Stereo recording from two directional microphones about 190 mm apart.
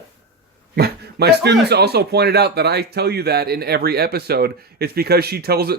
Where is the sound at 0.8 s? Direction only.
55° right (ahead or behind).